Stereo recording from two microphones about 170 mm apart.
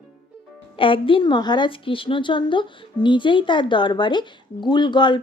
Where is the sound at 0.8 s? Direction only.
30° left (ahead or behind).